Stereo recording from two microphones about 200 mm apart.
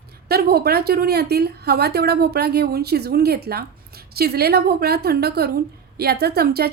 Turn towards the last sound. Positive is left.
turn(degrees=-50)  # may be behind; listen again after turning